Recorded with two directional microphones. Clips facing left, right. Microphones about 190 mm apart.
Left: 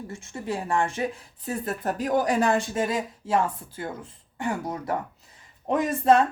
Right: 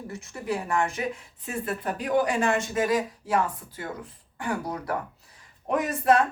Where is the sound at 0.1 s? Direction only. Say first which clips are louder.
Right 2 dB; 25° left (ahead or behind).